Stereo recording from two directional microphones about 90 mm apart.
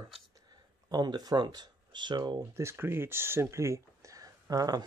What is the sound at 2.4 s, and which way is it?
Speech, 30° right (ahead or behind).